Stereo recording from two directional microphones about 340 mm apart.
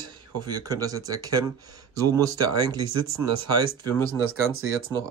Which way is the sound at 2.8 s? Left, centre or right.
Right.